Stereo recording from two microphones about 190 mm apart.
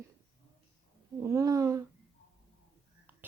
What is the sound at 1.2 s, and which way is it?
Speech, 15° right (ahead or behind).